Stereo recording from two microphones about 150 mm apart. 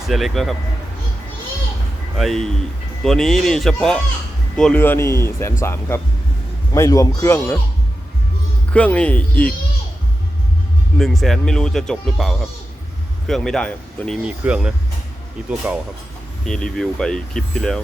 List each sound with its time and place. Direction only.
0.1 s speech: centre (ahead or behind)
2.1 s speech: centre (ahead or behind)
8.7 s speech: 10° left (ahead or behind)
10.9 s speech: centre (ahead or behind)
14.3 s speech: 5° right (ahead or behind)
16.5 s speech: 5° left (ahead or behind)